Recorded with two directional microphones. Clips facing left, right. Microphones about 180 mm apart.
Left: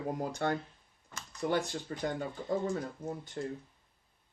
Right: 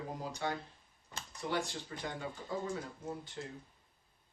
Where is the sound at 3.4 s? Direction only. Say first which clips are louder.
Left 7 dB; 45° left (ahead or behind).